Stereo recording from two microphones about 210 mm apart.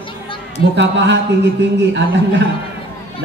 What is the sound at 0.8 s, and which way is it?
A man's voice, 55° right (ahead or behind).